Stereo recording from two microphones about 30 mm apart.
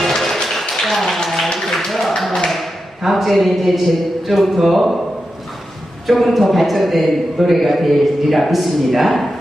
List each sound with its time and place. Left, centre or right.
0.0 s a sound: centre
3.0 s a man's voice: centre
6.0 s a man's voice: centre